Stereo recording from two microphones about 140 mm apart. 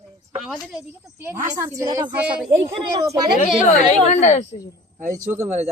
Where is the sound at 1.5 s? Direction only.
25° right (ahead or behind).